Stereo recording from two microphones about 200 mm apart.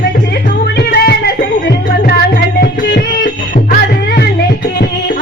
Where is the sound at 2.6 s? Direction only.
45° left (ahead or behind).